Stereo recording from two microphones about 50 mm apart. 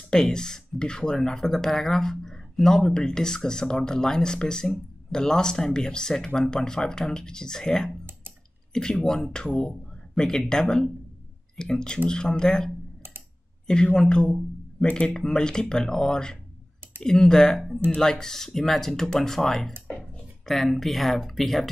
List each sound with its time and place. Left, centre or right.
0.1 s speech: centre